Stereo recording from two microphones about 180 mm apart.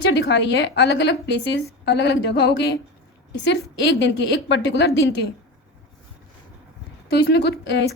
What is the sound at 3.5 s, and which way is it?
Speech, 80° left.